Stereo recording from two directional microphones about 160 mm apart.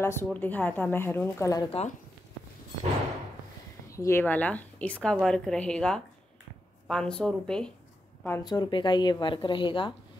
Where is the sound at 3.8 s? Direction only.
20° left (ahead or behind).